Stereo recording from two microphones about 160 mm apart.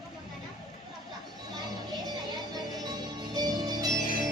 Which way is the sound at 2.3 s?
25° right (ahead or behind).